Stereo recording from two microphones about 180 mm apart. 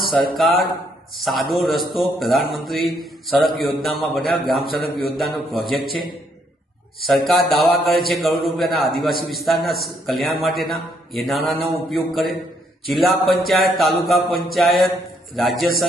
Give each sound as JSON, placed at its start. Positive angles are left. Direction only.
{"t": 0.0, "sound": "a man's voice", "side_deg": 0}
{"t": 7.0, "sound": "a man's voice", "side_deg": 0}